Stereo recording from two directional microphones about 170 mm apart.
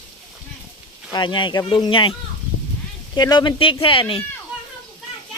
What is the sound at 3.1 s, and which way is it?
Speech, 25° left (ahead or behind).